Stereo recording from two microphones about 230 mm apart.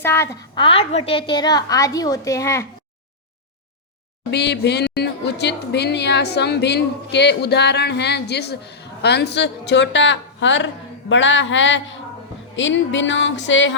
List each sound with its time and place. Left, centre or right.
0.0 s a woman's voice: centre
4.3 s a woman's voice: left